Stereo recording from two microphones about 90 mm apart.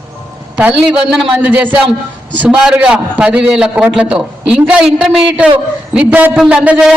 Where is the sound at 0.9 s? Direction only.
10° right (ahead or behind).